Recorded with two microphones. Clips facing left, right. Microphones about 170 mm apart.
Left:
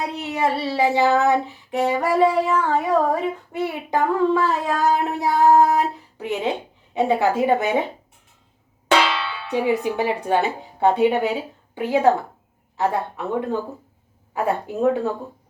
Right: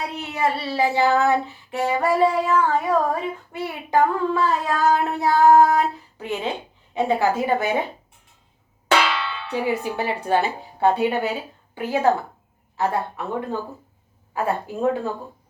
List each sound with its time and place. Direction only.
0.2 s child singing: 20° left (ahead or behind)
8.9 s speech: 20° left (ahead or behind)
12.7 s child singing: 20° left (ahead or behind)